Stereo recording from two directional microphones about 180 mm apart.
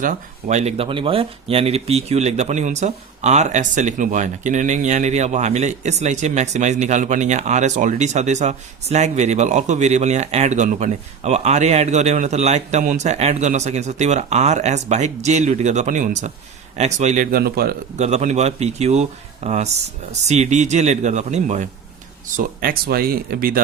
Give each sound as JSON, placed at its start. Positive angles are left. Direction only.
{"t": 0.0, "sound": "speech", "side_deg": -45}
{"t": 17.9, "sound": "speech", "side_deg": -40}